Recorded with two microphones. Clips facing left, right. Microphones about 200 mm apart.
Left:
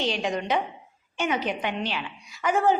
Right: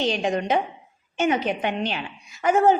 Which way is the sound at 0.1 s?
45° right (ahead or behind).